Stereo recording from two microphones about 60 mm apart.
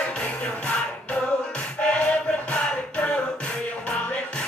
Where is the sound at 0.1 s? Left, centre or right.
Centre.